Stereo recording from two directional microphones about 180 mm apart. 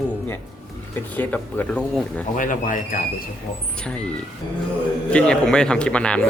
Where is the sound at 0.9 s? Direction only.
10° left (ahead or behind).